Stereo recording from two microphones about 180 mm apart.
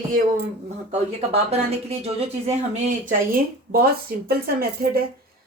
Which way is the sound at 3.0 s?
55° right (ahead or behind).